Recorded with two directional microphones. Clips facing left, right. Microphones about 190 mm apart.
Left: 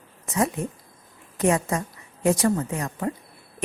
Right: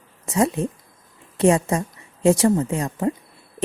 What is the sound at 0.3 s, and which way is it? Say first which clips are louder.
A woman's voice: right 4 dB; 25° right (ahead or behind).